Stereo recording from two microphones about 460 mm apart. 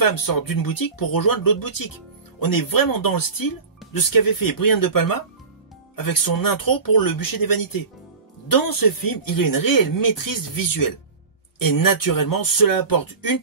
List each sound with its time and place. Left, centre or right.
0.0 s speech: left